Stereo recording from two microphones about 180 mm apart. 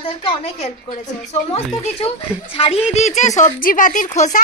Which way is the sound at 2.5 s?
30° left (ahead or behind).